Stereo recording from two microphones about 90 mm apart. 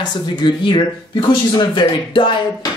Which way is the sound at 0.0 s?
60° left (ahead or behind).